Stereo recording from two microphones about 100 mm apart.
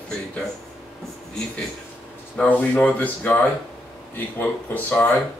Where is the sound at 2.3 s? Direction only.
15° left (ahead or behind).